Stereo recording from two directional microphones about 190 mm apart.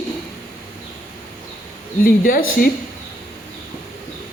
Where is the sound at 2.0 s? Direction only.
50° left (ahead or behind).